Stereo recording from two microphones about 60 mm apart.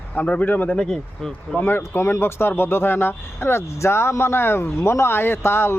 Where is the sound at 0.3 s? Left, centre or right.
Left.